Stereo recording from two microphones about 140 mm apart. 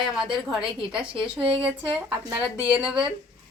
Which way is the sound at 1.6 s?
10° right (ahead or behind).